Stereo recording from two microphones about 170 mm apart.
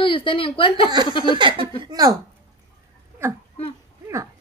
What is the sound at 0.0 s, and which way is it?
Speech, 30° left (ahead or behind).